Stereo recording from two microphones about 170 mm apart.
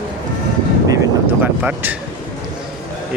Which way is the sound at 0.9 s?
20° right (ahead or behind).